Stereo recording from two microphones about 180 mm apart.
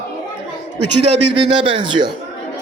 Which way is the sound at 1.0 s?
35° right (ahead or behind).